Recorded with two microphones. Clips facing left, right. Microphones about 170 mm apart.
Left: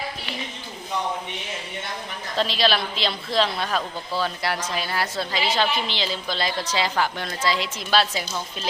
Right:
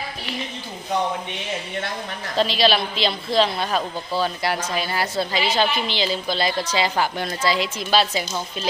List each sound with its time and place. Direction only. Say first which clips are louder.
2.4 s a woman's voice: right 3 dB; centre (ahead or behind)